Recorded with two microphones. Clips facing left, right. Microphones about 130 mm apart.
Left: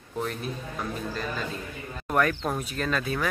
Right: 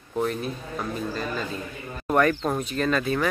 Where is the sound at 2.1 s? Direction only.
Centre (ahead or behind).